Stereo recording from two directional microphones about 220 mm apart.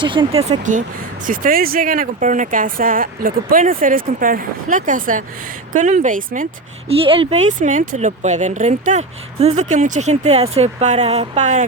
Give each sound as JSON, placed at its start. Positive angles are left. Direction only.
{"t": 0.0, "sound": "speech", "side_deg": -20}